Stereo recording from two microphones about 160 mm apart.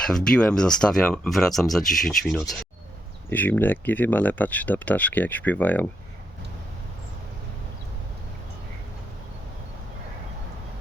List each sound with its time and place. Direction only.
0.1 s speech: 5° left (ahead or behind)